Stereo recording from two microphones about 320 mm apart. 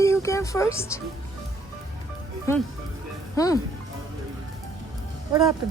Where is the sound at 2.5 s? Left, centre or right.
Centre.